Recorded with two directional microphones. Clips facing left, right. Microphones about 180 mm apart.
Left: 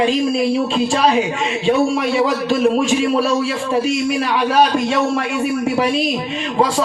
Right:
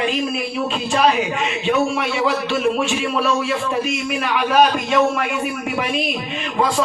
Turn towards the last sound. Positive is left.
turn(degrees=35)  # may be behind; listen again after turning